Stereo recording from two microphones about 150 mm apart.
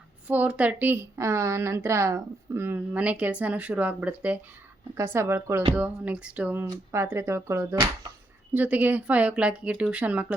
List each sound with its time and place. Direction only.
0.3 s speech: 10° right (ahead or behind)